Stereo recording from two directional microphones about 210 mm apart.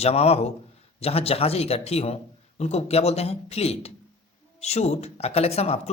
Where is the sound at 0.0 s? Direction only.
30° left (ahead or behind).